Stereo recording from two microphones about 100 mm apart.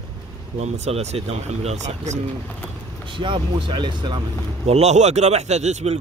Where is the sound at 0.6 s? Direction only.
90° right.